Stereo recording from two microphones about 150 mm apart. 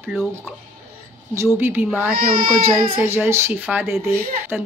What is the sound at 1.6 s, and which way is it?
Speech, 15° right (ahead or behind).